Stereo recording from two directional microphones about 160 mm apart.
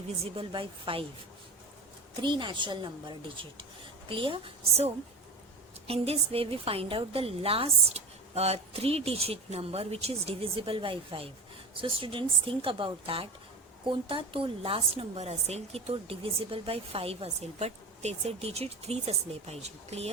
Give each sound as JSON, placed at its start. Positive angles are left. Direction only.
{"t": 0.3, "sound": "a woman's voice", "side_deg": -35}
{"t": 2.2, "sound": "a woman's voice", "side_deg": -30}
{"t": 5.9, "sound": "a woman's voice", "side_deg": -35}